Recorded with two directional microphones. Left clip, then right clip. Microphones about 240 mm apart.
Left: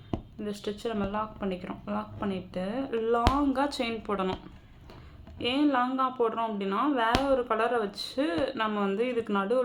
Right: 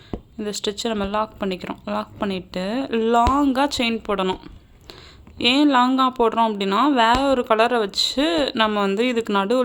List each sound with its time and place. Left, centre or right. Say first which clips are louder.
0.4 s speech: right 10 dB; right
5.4 s speech: right 10 dB; right